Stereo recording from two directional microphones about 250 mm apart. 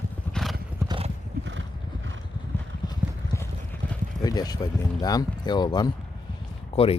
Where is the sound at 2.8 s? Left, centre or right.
Centre.